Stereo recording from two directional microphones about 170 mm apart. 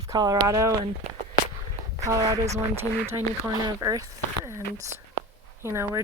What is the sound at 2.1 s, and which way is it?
Speech, 20° right (ahead or behind).